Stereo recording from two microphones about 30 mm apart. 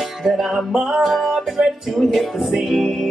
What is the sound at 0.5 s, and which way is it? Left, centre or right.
Music, centre.